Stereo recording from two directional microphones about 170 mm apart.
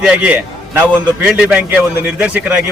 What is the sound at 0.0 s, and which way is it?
A man's voice, 5° right (ahead or behind).